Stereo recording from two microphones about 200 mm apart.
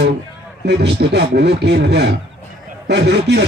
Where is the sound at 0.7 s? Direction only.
55° right (ahead or behind).